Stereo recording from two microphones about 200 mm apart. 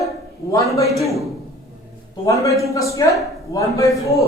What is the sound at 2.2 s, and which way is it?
A woman's voice, 15° left (ahead or behind).